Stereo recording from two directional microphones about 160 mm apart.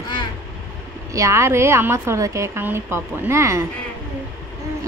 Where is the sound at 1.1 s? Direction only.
20° right (ahead or behind).